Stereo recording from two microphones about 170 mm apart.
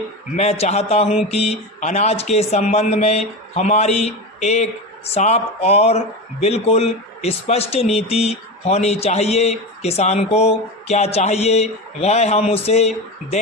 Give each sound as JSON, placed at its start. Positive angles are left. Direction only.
{"t": 0.3, "sound": "speech", "side_deg": 40}